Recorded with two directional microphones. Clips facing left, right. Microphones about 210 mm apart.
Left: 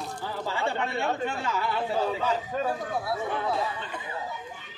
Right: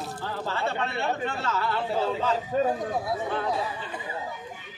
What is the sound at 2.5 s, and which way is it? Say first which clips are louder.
Speech: right 4 dB; 20° right (ahead or behind).